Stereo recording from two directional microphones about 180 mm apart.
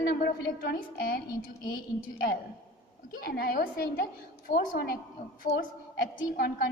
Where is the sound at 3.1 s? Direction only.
55° left (ahead or behind).